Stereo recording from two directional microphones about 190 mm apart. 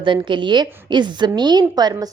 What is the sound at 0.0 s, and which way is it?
A woman's voice, 25° right (ahead or behind).